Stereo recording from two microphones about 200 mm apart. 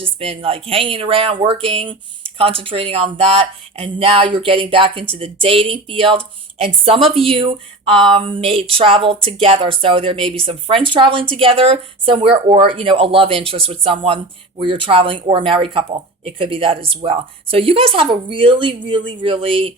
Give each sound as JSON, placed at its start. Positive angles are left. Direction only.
{"t": 0.0, "sound": "speech", "side_deg": -30}
{"t": 7.0, "sound": "speech", "side_deg": 0}
{"t": 7.3, "sound": "speech", "side_deg": -25}